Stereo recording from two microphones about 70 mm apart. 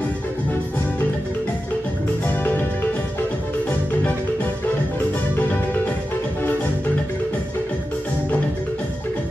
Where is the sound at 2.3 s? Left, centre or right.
Left.